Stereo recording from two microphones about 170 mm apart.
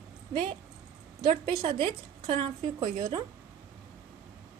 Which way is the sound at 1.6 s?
30° right (ahead or behind).